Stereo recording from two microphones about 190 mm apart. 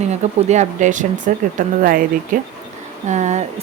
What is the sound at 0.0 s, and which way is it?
Speech, 35° right (ahead or behind).